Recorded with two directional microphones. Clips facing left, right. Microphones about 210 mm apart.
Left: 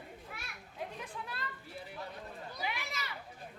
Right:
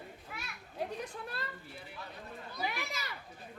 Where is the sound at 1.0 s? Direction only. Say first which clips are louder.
Right 3 dB; 45° right (ahead or behind).